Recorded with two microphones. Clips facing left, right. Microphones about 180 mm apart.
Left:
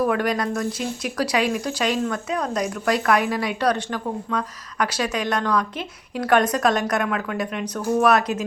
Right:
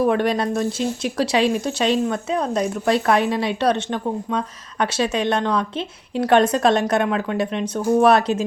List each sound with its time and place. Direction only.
0.0 s speech: 25° right (ahead or behind)